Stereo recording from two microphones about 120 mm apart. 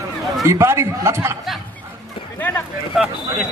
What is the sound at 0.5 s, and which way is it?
Speech, 25° right (ahead or behind).